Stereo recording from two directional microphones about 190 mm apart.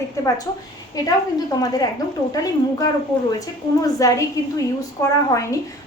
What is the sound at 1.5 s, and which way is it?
A woman's voice, 20° left (ahead or behind).